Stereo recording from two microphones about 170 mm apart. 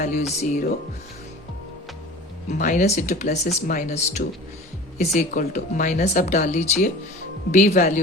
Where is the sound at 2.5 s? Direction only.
45° left (ahead or behind).